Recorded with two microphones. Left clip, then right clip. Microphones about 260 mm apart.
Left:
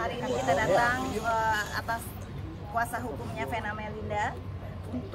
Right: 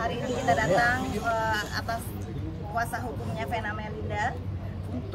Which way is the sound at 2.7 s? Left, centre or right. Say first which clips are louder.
Even; centre.